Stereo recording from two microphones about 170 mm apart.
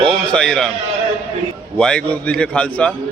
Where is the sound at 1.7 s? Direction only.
5° left (ahead or behind).